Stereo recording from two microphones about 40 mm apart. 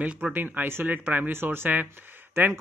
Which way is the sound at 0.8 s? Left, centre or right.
Right.